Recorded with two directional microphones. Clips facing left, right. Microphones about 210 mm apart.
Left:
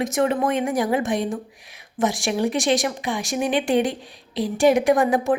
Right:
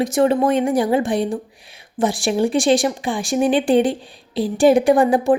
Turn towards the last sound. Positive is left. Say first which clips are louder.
# right 4 dB
turn(degrees=-30)  # may be behind; listen again after turning